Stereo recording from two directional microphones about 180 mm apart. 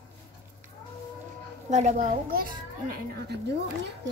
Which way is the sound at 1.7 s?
40° right (ahead or behind).